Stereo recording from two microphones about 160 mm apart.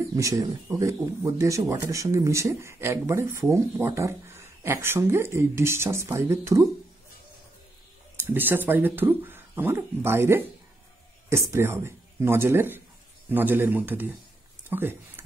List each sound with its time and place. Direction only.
0.1 s speech: 20° right (ahead or behind)
8.2 s speech: 15° right (ahead or behind)
11.5 s speech: 15° right (ahead or behind)